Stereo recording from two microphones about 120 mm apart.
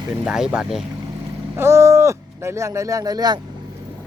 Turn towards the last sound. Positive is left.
turn(degrees=-30)  # may be behind; listen again after turning